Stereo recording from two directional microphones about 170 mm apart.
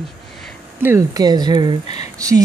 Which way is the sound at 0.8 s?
20° right (ahead or behind).